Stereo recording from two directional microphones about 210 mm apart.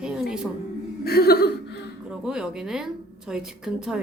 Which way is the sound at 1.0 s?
50° left (ahead or behind).